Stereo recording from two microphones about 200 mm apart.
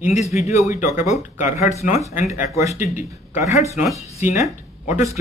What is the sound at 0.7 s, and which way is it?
Speech, 40° left (ahead or behind).